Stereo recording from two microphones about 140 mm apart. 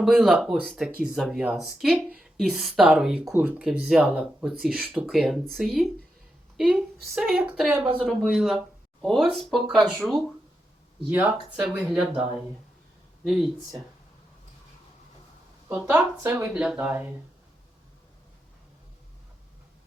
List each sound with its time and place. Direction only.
0.0 s speech: 5° right (ahead or behind)
16.3 s speech: 10° right (ahead or behind)